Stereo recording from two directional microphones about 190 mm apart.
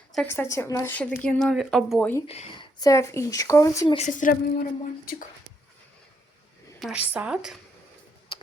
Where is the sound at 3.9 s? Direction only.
40° left (ahead or behind).